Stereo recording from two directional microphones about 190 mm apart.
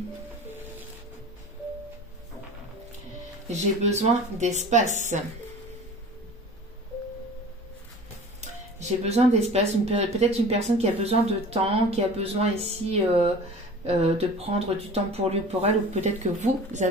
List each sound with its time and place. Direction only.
3.5 s speech: 35° right (ahead or behind)
8.4 s speech: 35° right (ahead or behind)